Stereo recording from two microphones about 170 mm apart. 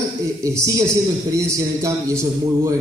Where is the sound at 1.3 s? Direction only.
20° right (ahead or behind).